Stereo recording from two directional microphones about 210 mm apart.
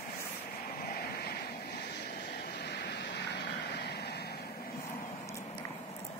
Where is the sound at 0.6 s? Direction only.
45° left (ahead or behind).